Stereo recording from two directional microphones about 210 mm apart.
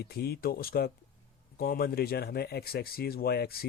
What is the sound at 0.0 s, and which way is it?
Speech, 50° left (ahead or behind).